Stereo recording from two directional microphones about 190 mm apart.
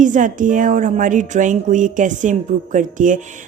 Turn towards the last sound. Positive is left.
turn(degrees=-45)  # may be behind; listen again after turning